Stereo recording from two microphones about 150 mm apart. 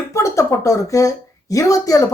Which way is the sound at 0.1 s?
20° left (ahead or behind).